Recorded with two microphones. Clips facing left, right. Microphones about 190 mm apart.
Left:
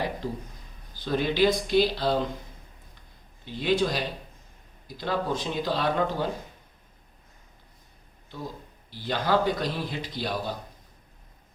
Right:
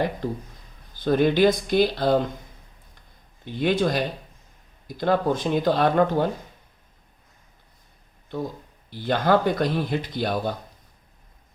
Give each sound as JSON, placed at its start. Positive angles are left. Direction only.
{"t": 0.9, "sound": "speech", "side_deg": -50}
{"t": 3.4, "sound": "speech", "side_deg": -50}
{"t": 8.9, "sound": "speech", "side_deg": -50}